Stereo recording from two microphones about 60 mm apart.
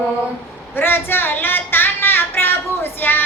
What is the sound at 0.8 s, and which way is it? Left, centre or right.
Child singing, left.